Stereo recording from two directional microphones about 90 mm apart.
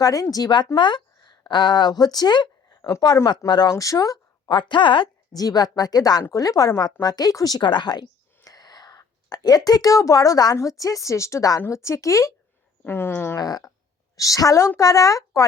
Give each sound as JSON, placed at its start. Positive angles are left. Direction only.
{"t": 0.0, "sound": "a woman's voice", "side_deg": 40}
{"t": 3.7, "sound": "speech", "side_deg": 40}
{"t": 4.4, "sound": "a woman's voice", "side_deg": 60}
{"t": 5.3, "sound": "a woman's voice", "side_deg": 45}
{"t": 12.8, "sound": "speech", "side_deg": 25}
{"t": 13.4, "sound": "a woman's voice", "side_deg": 45}